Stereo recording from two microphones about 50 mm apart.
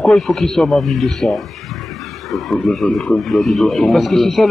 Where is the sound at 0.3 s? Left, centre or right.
Centre.